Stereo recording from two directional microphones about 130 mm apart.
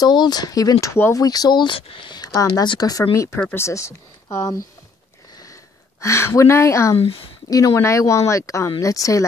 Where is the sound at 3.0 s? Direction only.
20° left (ahead or behind).